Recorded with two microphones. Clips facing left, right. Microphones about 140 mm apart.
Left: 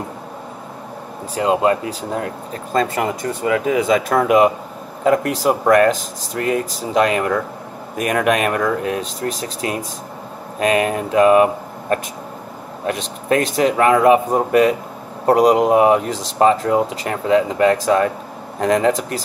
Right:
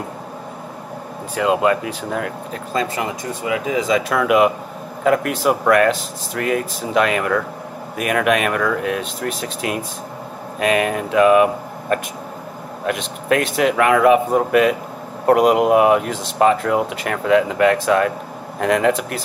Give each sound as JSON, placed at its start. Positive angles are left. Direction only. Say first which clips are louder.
{"t": 1.3, "sound": "speech", "louder": "left 1 dB", "side_deg": 35}
{"t": 2.7, "sound": "speech", "louder": "left 4 dB", "side_deg": 50}